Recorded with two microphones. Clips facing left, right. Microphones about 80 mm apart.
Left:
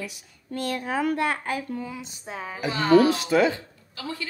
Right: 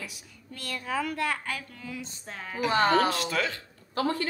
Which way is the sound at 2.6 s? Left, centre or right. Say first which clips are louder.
Left 5 dB; right.